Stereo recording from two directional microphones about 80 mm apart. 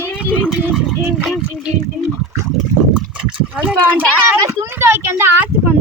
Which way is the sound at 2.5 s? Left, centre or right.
Centre.